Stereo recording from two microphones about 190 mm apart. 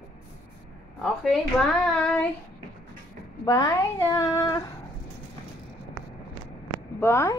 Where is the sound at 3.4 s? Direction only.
20° left (ahead or behind).